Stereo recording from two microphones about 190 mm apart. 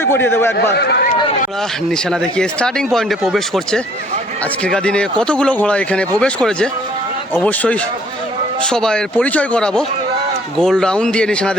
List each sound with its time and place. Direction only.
0.1 s speech: 10° left (ahead or behind)
0.5 s speech: 60° left (ahead or behind)
1.9 s speech: 5° left (ahead or behind)